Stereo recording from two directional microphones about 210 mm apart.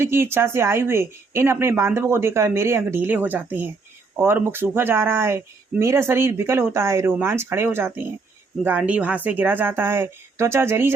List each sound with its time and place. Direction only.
0.0 s speech: 10° right (ahead or behind)